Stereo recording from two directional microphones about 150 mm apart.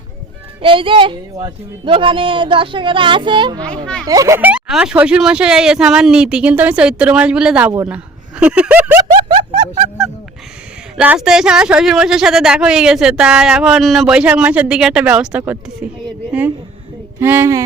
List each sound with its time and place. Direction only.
0.6 s a man's voice: 35° right (ahead or behind)
4.4 s speech: 10° right (ahead or behind)
9.1 s music: 30° right (ahead or behind)
10.9 s speech: 5° right (ahead or behind)
17.2 s speech: 15° right (ahead or behind)